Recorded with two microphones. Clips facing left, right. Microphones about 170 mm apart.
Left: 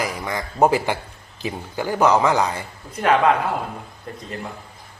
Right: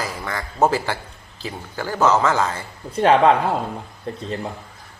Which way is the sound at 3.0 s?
30° right (ahead or behind).